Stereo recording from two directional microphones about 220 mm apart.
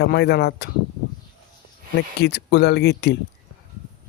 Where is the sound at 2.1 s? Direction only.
50° left (ahead or behind).